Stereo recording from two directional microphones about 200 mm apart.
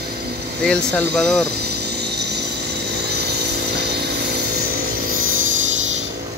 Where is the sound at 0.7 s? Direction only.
5° left (ahead or behind).